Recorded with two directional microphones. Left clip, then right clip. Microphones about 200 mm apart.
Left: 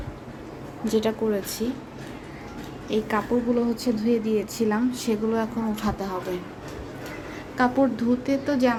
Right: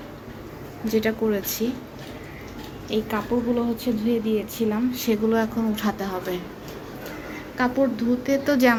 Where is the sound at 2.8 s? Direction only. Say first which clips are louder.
Left 1 dB; 20° left (ahead or behind).